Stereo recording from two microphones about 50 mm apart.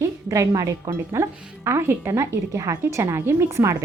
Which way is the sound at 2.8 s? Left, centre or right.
Right.